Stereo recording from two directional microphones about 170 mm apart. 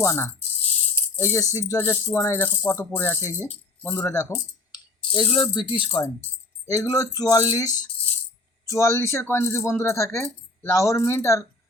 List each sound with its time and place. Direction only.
0.0 s speech: 15° left (ahead or behind)
0.9 s keys jangling: 15° left (ahead or behind)
1.5 s speech: 15° left (ahead or behind)